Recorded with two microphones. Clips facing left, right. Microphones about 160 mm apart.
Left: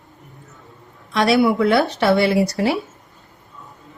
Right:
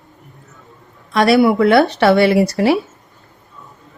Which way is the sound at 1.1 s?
55° right (ahead or behind).